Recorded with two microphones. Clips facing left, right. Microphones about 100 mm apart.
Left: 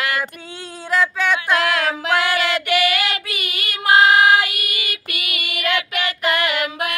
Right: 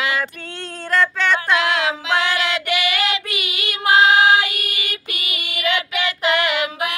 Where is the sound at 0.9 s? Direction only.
5° left (ahead or behind).